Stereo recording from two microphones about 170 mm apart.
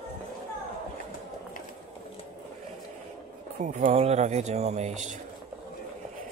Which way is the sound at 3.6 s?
45° right (ahead or behind).